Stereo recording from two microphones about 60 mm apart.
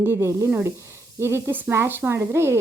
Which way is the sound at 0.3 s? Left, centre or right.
Right.